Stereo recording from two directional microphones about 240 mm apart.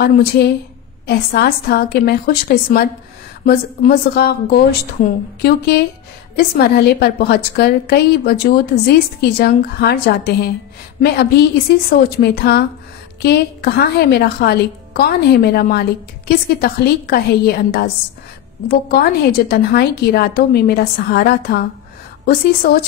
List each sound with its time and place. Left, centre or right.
0.0 s a woman's voice: left